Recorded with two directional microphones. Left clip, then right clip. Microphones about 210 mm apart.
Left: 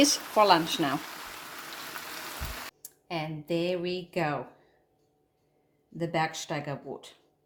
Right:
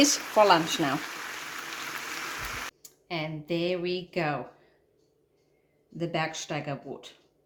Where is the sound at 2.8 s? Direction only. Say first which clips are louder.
Right 1 dB; 30° left (ahead or behind).